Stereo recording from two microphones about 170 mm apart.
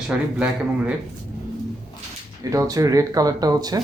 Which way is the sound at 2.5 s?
20° right (ahead or behind).